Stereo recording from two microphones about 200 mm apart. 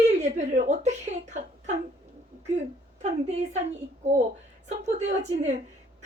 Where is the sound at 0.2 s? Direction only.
40° right (ahead or behind).